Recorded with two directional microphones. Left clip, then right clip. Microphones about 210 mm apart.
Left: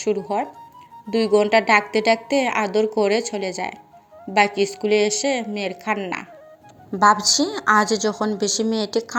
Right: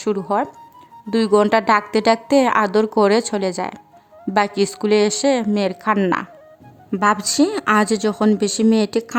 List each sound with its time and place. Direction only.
0.3 s speech: 20° right (ahead or behind)
6.9 s a woman's voice: 40° right (ahead or behind)